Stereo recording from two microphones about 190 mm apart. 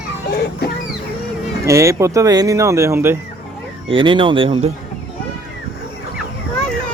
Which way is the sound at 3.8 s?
25° right (ahead or behind).